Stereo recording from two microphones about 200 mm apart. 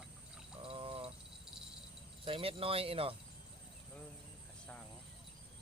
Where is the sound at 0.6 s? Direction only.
30° right (ahead or behind).